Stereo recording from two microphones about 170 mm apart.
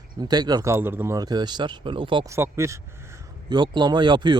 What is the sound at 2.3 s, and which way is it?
Speech, 15° right (ahead or behind).